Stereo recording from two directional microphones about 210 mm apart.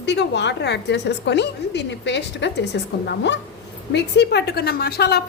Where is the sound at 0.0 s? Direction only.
55° left (ahead or behind).